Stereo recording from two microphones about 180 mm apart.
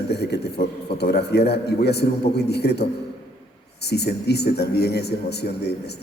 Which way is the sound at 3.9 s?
65° left (ahead or behind).